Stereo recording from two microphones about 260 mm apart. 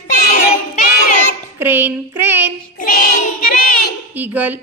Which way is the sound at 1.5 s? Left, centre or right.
Centre.